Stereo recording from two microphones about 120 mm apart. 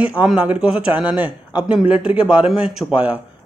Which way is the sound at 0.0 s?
10° right (ahead or behind).